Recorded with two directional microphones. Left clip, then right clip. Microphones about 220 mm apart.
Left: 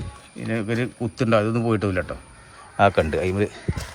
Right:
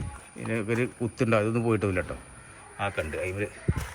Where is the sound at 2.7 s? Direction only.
20° left (ahead or behind).